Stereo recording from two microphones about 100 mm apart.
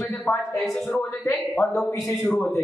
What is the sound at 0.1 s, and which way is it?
Speech, 20° left (ahead or behind).